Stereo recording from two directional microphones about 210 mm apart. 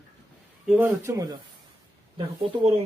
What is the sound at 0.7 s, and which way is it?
Speech, 10° right (ahead or behind).